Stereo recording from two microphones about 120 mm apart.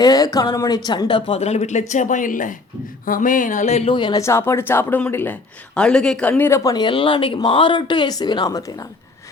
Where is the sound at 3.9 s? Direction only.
40° left (ahead or behind).